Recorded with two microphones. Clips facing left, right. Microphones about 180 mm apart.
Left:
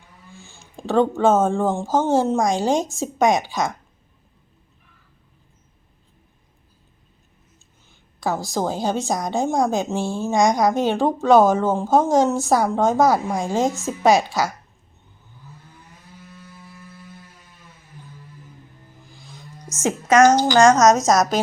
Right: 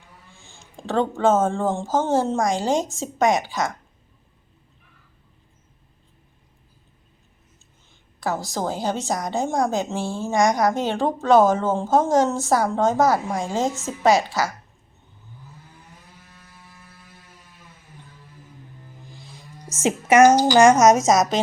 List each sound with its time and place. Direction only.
0.6 s a woman's voice: 10° left (ahead or behind)
8.2 s a woman's voice: 15° left (ahead or behind)
19.3 s a sound: 30° right (ahead or behind)
19.8 s a woman's voice: 10° right (ahead or behind)